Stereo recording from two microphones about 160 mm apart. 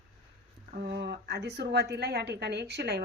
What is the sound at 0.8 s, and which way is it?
A woman's voice, 90° right.